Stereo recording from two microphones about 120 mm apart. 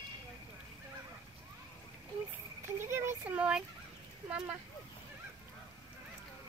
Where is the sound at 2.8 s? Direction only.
20° right (ahead or behind).